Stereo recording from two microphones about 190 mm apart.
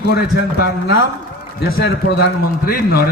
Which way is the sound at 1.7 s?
60° left (ahead or behind).